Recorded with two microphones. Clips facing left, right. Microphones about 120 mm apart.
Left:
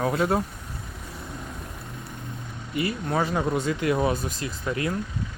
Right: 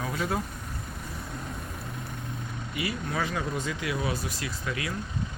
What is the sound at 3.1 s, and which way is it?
Speech, 35° left (ahead or behind).